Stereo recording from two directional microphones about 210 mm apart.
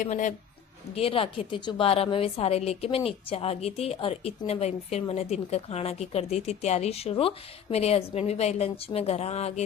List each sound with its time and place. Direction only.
0.0 s a woman's voice: 35° left (ahead or behind)